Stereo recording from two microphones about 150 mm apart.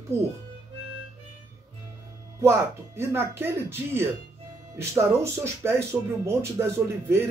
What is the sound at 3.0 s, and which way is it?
Speech, 15° right (ahead or behind).